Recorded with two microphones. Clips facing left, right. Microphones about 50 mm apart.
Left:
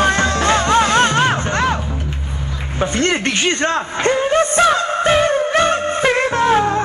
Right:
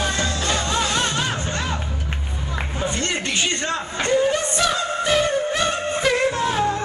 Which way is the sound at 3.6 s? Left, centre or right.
Left.